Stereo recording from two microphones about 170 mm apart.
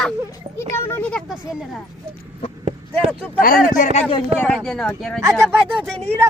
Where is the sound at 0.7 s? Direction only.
15° left (ahead or behind).